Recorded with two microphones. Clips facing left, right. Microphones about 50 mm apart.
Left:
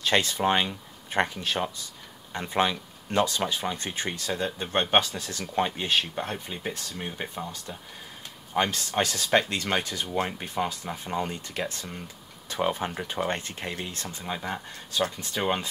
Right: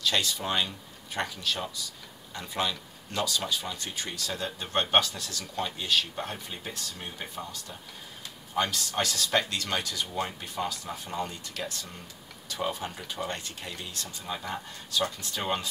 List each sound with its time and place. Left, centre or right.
0.0 s speech: left